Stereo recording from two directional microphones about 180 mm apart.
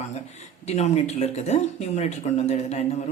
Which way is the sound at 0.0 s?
40° left (ahead or behind).